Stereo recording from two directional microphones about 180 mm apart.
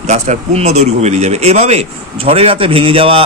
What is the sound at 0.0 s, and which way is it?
Speech, 40° right (ahead or behind).